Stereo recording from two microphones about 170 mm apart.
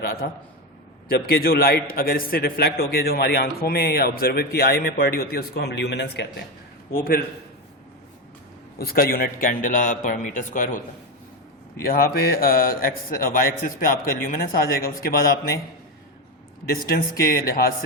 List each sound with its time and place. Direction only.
0.2 s a man's voice: 70° left (ahead or behind); by 6.2 s 90° left
6.9 s a man's voice: 60° left (ahead or behind)
8.8 s a man's voice: 60° left (ahead or behind)
16.6 s a man's voice: 60° left (ahead or behind)